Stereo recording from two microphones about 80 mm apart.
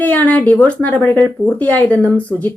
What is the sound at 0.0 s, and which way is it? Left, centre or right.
Speech, left.